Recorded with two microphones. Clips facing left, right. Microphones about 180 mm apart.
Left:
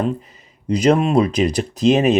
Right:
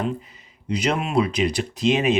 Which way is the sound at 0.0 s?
45° left (ahead or behind).